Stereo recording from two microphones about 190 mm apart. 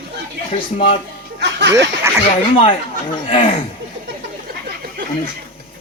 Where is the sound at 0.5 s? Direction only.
30° left (ahead or behind).